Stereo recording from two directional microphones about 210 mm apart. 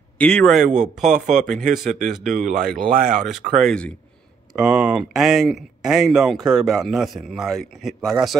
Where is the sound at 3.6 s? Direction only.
5° left (ahead or behind).